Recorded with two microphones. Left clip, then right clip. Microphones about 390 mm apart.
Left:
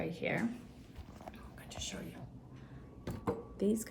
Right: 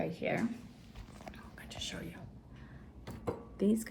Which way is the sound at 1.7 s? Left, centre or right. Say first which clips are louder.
Right 2 dB; centre.